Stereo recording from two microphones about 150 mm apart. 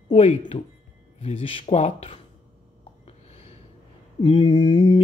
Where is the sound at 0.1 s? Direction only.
40° left (ahead or behind).